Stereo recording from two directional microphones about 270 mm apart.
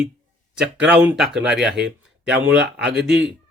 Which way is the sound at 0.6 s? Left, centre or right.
Centre.